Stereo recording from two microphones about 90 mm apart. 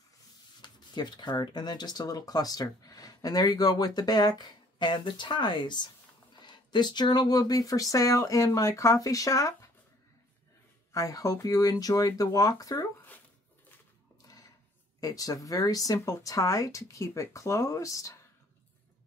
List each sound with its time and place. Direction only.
0.6 s speech: 55° left (ahead or behind)
10.9 s speech: 40° left (ahead or behind)
14.2 s a sound: 45° left (ahead or behind)
15.0 s speech: 40° left (ahead or behind)